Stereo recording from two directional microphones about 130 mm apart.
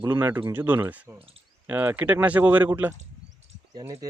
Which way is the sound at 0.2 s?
15° right (ahead or behind).